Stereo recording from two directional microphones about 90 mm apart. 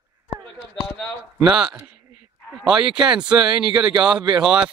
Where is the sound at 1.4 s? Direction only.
10° right (ahead or behind).